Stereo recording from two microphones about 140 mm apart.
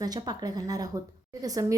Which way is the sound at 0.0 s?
30° right (ahead or behind).